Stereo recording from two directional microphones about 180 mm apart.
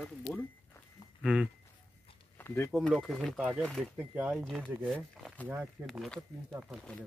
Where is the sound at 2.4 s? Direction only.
15° left (ahead or behind).